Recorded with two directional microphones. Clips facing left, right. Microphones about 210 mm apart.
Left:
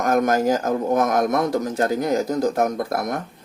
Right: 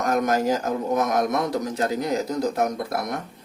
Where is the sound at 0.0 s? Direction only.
50° left (ahead or behind).